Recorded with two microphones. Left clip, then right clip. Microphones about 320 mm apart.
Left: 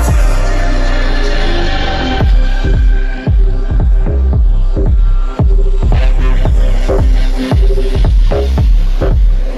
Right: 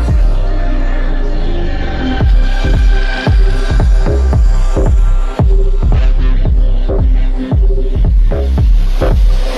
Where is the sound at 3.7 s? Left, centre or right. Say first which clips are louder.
Right 5 dB; right.